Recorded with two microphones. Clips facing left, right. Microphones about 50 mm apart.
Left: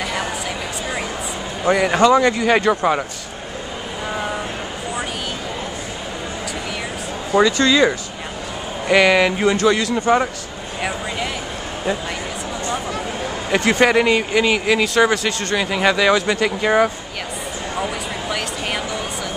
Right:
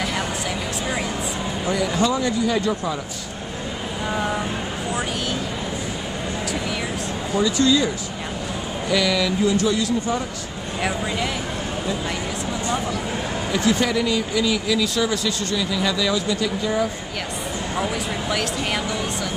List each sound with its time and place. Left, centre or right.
1.7 s speech: left
4.1 s vehicle: centre
7.3 s speech: left
10.8 s speech: centre
13.5 s speech: left